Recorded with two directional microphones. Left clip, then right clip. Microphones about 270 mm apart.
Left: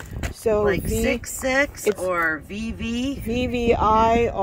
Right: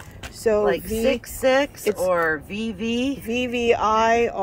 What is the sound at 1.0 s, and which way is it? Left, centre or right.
Speech, right.